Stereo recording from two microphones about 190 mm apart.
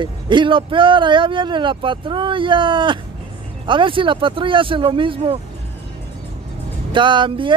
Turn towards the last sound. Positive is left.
turn(degrees=-25)  # may be behind; listen again after turning